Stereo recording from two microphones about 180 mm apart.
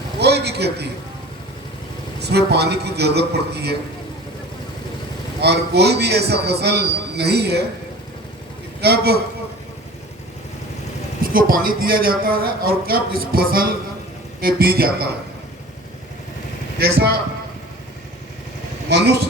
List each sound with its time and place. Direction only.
0.2 s a sound: 65° right (ahead or behind)
2.2 s a man's voice: 65° right (ahead or behind)
5.4 s a man's voice: 65° right (ahead or behind)
8.8 s a man's voice: 60° right (ahead or behind)
11.2 s a man's voice: 50° right (ahead or behind)
16.8 s a man's voice: 60° right (ahead or behind)